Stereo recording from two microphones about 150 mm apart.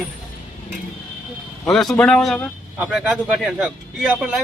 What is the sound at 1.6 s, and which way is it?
Speech, centre (ahead or behind).